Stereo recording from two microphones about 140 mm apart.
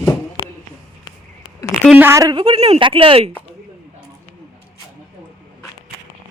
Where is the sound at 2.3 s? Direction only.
40° right (ahead or behind).